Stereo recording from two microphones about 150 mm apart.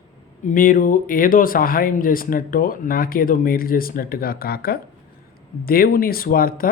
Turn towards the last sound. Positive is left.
turn(degrees=75)  # may be behind; listen again after turning